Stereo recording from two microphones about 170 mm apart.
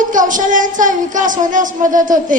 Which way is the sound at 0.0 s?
50° right (ahead or behind).